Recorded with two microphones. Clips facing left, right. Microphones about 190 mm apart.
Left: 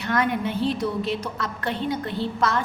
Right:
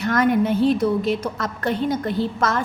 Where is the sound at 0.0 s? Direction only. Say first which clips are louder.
Right 6 dB; 45° right (ahead or behind).